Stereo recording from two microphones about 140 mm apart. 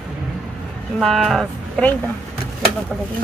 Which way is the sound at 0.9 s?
Centre (ahead or behind).